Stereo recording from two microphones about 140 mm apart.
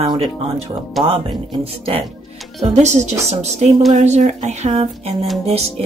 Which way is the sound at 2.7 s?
55° right (ahead or behind).